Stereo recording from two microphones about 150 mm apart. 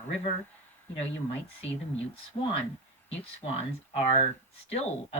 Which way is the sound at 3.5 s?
50° left (ahead or behind).